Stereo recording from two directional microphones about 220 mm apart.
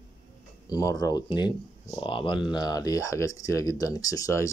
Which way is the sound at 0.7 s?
15° left (ahead or behind).